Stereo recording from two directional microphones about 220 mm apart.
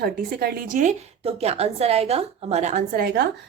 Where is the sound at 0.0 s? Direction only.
45° right (ahead or behind).